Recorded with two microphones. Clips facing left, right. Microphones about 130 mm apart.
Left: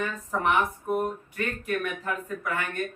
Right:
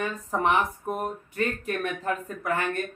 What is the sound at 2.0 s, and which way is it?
Speech, 35° right (ahead or behind).